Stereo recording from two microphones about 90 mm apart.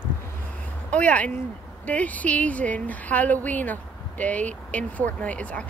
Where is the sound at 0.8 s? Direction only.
15° left (ahead or behind).